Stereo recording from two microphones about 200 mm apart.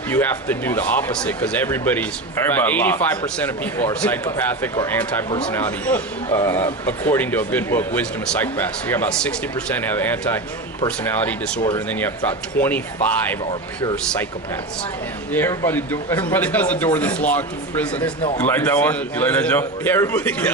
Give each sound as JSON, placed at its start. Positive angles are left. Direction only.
{"t": 0.1, "sound": "a man's voice", "side_deg": 10}
{"t": 15.3, "sound": "a man's voice", "side_deg": 10}
{"t": 18.2, "sound": "speech", "side_deg": 25}
{"t": 18.4, "sound": "a man's voice", "side_deg": 10}